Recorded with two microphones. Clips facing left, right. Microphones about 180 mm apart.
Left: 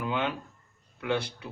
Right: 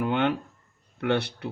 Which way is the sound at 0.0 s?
65° right (ahead or behind).